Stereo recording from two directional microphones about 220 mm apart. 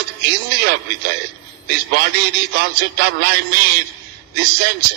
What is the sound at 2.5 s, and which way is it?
Speech, 45° right (ahead or behind).